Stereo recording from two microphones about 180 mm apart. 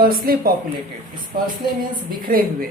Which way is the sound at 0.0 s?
55° right (ahead or behind).